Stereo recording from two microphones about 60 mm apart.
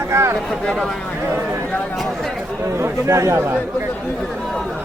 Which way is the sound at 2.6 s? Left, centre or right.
Right.